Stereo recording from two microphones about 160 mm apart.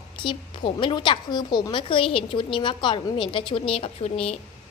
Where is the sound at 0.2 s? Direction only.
30° left (ahead or behind).